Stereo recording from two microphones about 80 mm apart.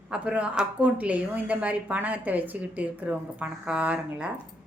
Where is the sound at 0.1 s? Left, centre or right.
Centre.